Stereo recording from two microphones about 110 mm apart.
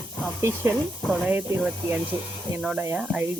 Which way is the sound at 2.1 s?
30° right (ahead or behind).